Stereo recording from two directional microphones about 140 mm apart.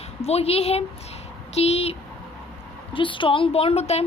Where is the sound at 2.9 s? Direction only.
35° left (ahead or behind).